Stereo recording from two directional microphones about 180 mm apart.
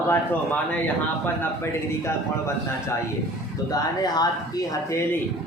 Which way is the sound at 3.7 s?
20° left (ahead or behind).